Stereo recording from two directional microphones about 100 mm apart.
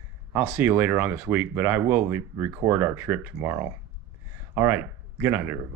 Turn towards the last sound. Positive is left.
turn(degrees=-20)  # may be behind; listen again after turning